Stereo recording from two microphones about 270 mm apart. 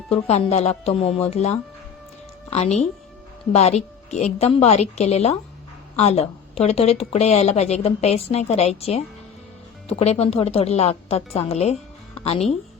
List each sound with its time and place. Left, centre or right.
0.3 s speech: left
10.0 s speech: left